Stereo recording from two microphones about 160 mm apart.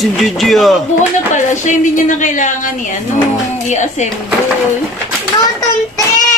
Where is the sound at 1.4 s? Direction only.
50° left (ahead or behind).